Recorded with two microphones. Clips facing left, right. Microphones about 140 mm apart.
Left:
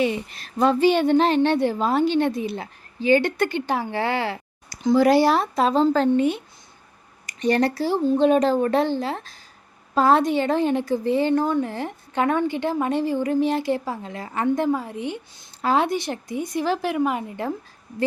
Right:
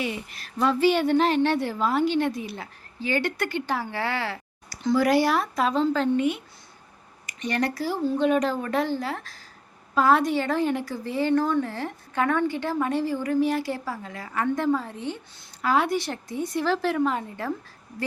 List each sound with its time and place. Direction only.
0.0 s a woman's voice: 25° left (ahead or behind)
4.9 s a woman's voice: 30° left (ahead or behind)
15.6 s a woman's voice: 25° left (ahead or behind)